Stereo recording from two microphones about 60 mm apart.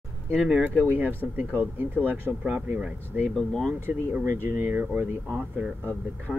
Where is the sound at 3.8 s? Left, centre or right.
Right.